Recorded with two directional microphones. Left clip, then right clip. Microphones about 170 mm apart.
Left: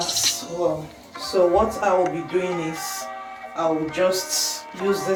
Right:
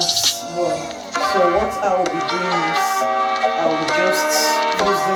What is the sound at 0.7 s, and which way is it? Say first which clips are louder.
Speech: right 7 dB; 70° right (ahead or behind).